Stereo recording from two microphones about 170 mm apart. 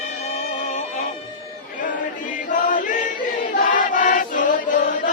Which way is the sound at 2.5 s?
50° left (ahead or behind).